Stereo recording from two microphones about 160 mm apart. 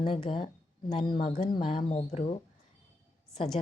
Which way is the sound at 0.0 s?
35° left (ahead or behind).